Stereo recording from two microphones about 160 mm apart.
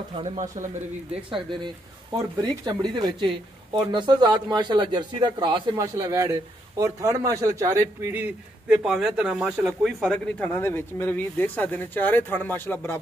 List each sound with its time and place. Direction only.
0.1 s speech: 45° right (ahead or behind)
1.1 s a man's voice: 30° right (ahead or behind); by 13.0 s 15° left (ahead or behind)